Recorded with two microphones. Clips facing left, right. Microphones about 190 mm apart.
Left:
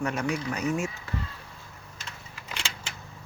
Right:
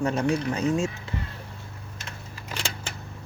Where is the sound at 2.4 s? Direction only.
35° right (ahead or behind).